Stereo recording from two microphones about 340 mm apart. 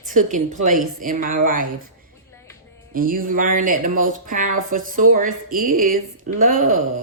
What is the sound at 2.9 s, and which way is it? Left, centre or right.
Speech, right.